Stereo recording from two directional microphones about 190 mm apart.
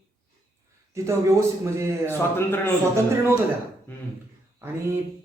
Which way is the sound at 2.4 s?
10° left (ahead or behind).